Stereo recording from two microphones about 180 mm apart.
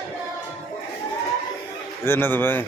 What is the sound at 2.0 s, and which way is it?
Speech, 10° left (ahead or behind).